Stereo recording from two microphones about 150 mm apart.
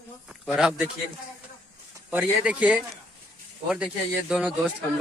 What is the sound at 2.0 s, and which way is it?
A man's voice, 10° right (ahead or behind).